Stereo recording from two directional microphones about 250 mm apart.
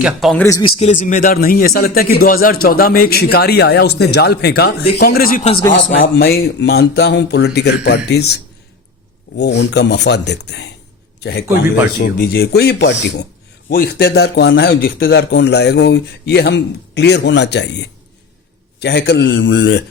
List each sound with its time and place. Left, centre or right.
0.0 s a man's voice: centre
0.4 s a man's voice: centre
0.8 s a man's voice: left
9.4 s a man's voice: left
18.8 s speech: left